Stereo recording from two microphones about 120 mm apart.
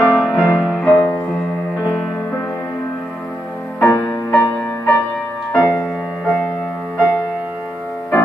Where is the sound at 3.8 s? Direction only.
20° left (ahead or behind).